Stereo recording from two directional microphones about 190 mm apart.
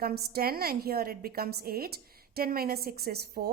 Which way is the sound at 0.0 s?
55° right (ahead or behind).